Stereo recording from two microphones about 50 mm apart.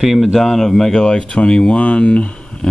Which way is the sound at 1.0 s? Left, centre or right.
Centre.